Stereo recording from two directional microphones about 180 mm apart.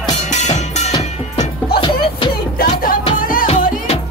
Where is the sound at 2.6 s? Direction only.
55° left (ahead or behind).